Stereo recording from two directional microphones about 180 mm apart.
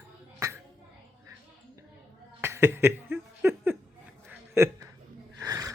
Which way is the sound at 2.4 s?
15° right (ahead or behind).